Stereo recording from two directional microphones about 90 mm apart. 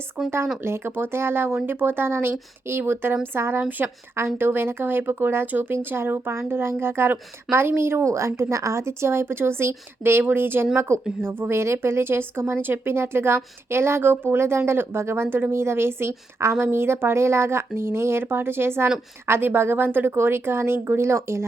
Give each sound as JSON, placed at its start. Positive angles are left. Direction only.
{"t": 0.6, "sound": "speech", "side_deg": -25}